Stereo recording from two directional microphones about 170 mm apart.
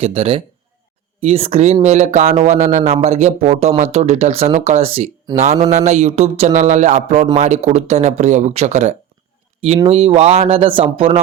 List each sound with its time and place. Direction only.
0.0 s speech: 35° right (ahead or behind)